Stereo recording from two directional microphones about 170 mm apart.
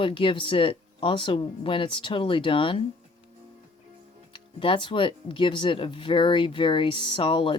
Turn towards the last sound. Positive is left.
turn(degrees=30)  # may be behind; listen again after turning